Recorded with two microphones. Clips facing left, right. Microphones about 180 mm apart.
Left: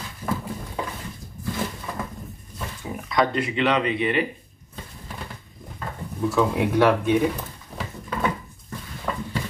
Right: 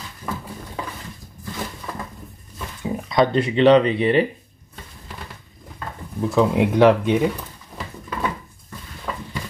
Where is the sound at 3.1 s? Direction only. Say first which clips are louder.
Right 4 dB; 30° right (ahead or behind).